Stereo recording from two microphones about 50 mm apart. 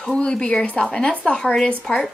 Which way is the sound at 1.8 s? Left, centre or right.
Centre.